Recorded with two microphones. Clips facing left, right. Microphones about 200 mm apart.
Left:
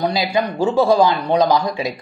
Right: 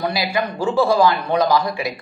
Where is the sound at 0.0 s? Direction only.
25° left (ahead or behind).